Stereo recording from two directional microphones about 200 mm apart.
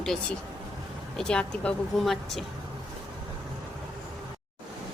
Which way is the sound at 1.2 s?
5° left (ahead or behind).